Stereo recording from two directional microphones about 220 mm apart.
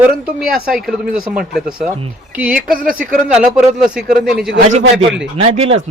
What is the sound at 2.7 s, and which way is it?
Speech, 40° right (ahead or behind).